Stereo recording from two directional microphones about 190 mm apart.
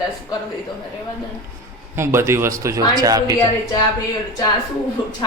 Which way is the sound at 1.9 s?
15° right (ahead or behind).